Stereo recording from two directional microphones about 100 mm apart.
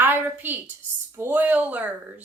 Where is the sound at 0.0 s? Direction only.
20° right (ahead or behind).